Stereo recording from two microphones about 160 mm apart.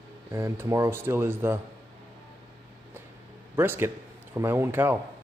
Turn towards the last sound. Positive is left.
turn(degrees=-15)  # may be behind; listen again after turning